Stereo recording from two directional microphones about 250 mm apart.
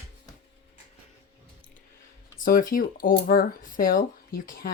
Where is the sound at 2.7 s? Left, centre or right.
Left.